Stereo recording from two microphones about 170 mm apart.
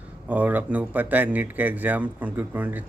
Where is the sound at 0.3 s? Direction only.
10° right (ahead or behind).